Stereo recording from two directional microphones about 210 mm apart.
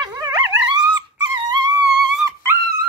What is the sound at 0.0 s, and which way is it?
Dog, 20° right (ahead or behind).